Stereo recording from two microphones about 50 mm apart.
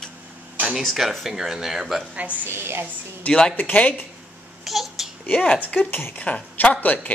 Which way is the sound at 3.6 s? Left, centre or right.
Left.